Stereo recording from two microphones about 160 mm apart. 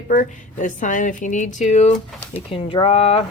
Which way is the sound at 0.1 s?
55° left (ahead or behind).